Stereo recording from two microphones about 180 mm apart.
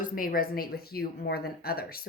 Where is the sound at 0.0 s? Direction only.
50° left (ahead or behind).